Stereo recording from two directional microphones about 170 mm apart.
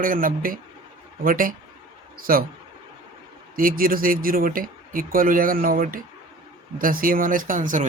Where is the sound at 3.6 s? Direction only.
55° right (ahead or behind).